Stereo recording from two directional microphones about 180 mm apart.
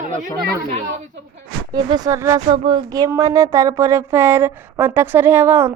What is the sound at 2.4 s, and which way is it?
Speech, 25° right (ahead or behind).